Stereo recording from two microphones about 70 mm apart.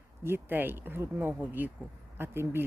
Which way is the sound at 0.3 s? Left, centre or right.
Right.